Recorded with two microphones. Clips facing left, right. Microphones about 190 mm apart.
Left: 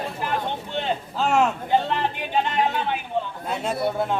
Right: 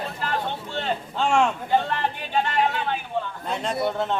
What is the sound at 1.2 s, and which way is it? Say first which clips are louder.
Speech: even; 5° left (ahead or behind).